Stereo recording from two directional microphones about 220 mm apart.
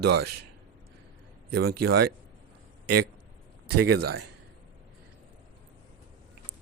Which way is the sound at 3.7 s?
90° right.